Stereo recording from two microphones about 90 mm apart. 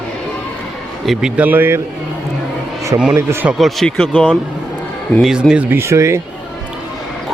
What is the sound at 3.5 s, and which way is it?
Speech, centre (ahead or behind).